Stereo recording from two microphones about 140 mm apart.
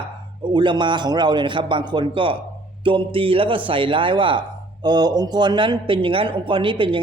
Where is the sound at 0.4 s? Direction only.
35° right (ahead or behind).